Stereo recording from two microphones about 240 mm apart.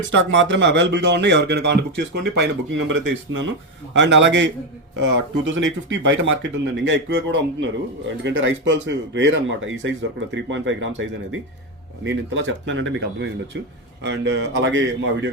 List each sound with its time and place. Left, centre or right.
0.1 s speech: right